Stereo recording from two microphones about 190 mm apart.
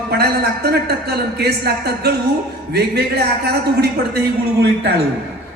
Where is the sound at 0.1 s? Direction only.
60° right (ahead or behind).